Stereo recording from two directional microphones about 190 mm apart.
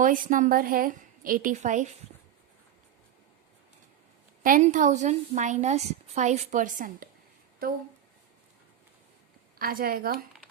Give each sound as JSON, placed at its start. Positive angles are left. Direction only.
{"t": 0.0, "sound": "a woman's voice", "side_deg": -45}
{"t": 4.4, "sound": "a woman's voice", "side_deg": -45}
{"t": 9.6, "sound": "a woman's voice", "side_deg": -50}